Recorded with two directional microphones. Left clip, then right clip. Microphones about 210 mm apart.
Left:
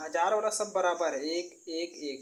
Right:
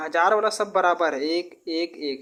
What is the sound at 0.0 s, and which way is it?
Speech, 30° right (ahead or behind).